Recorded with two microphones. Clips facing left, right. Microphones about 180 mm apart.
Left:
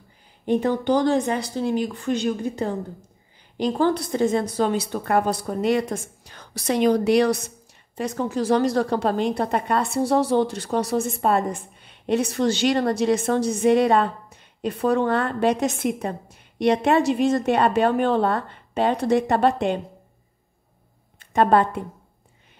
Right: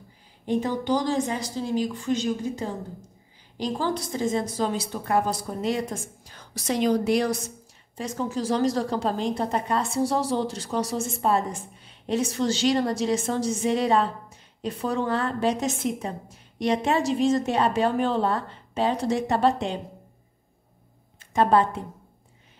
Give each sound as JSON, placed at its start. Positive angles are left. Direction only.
{"t": 0.5, "sound": "a woman's voice", "side_deg": 60}
{"t": 21.3, "sound": "a woman's voice", "side_deg": 60}